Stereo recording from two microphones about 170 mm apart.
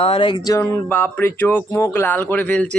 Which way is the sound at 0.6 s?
10° left (ahead or behind).